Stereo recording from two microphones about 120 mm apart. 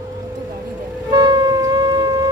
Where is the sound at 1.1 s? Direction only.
35° right (ahead or behind).